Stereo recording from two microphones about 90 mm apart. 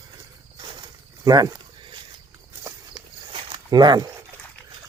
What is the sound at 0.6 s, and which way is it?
Snake, 55° right (ahead or behind).